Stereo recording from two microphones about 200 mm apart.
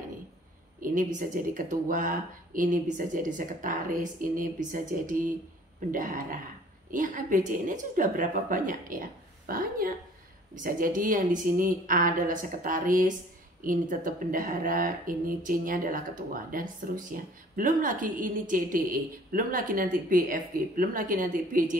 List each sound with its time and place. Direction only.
0.7 s speech: 40° right (ahead or behind)